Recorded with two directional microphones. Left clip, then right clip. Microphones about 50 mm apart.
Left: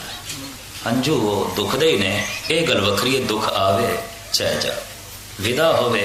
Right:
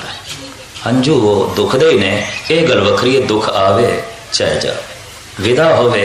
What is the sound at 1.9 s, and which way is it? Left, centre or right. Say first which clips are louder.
Speech: right 7 dB; left.